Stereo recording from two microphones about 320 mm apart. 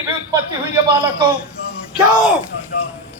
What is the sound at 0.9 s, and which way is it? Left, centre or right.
Speech, centre.